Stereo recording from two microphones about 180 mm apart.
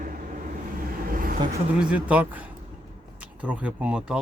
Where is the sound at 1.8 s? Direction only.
5° right (ahead or behind).